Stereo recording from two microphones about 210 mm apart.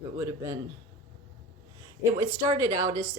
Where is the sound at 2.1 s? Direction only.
15° right (ahead or behind).